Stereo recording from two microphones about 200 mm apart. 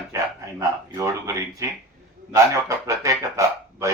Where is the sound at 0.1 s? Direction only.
15° right (ahead or behind).